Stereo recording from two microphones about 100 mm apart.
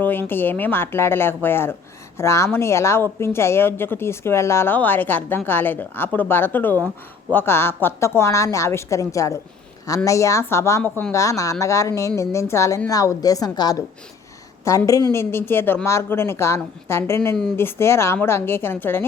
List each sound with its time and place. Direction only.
0.0 s speech: 20° left (ahead or behind); by 13.8 s 40° left (ahead or behind)
14.8 s speech: 35° left (ahead or behind)